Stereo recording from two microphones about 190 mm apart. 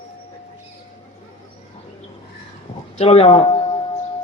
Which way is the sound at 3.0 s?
30° left (ahead or behind).